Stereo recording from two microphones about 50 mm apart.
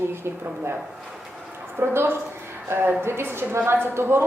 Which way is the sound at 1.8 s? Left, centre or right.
Right.